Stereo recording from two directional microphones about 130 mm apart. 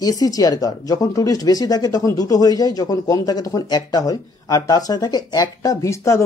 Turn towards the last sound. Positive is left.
turn(degrees=25)  # may be behind; listen again after turning